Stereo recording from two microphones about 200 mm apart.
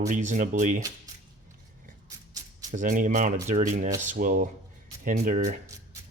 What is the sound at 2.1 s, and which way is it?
Music, 20° right (ahead or behind).